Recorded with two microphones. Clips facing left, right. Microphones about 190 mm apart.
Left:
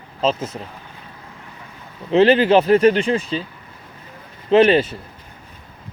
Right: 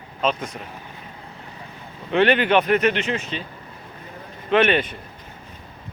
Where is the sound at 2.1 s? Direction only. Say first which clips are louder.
Left 5 dB; 25° left (ahead or behind).